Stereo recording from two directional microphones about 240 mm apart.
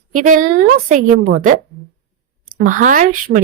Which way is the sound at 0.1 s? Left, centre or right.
Right.